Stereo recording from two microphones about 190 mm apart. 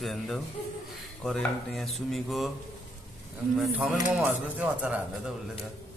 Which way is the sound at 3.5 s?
5° right (ahead or behind).